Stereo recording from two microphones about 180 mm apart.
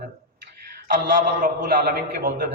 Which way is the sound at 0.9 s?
45° right (ahead or behind).